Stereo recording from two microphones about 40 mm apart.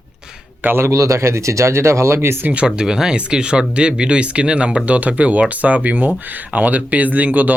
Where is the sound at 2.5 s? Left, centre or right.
Right.